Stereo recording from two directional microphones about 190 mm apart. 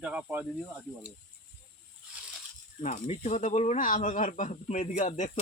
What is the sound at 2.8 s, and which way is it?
Speech, 35° left (ahead or behind).